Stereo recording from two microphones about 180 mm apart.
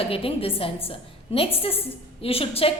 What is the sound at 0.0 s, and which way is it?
A woman's voice, 30° left (ahead or behind).